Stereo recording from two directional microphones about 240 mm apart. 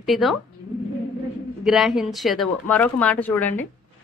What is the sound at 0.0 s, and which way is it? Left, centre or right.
Speech, centre.